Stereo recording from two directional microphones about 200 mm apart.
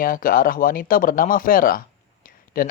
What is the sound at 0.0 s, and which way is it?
A man's voice, 45° left (ahead or behind).